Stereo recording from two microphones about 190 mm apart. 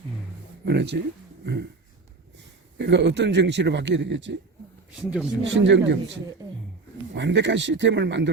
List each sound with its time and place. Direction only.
0.6 s speech: 60° right (ahead or behind)
2.7 s a man's voice: 65° right (ahead or behind)
4.9 s speech: 5° right (ahead or behind)
5.4 s a man's voice: 70° right (ahead or behind)